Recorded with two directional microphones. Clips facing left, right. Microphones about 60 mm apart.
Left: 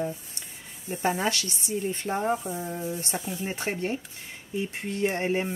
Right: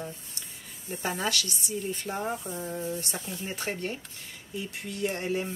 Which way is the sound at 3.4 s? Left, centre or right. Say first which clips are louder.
Left 2 dB; left.